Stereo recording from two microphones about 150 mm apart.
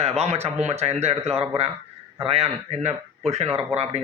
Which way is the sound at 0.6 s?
45° right (ahead or behind).